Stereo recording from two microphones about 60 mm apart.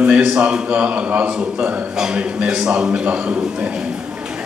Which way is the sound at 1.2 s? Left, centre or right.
Centre.